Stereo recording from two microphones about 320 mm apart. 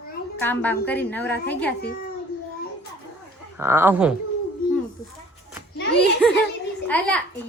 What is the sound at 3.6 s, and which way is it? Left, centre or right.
Speech, centre.